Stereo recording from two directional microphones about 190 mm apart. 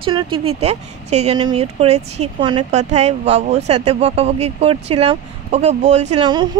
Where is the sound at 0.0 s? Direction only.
25° right (ahead or behind).